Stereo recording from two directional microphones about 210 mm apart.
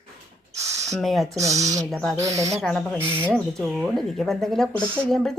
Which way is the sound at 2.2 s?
15° right (ahead or behind).